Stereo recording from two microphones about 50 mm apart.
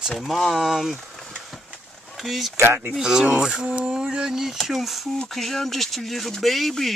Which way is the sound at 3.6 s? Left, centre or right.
Right.